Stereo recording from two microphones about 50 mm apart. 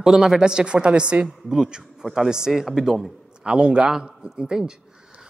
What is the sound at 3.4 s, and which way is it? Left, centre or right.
A man's voice, centre.